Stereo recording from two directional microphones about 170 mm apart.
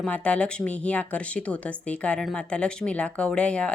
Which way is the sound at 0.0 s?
5° left (ahead or behind).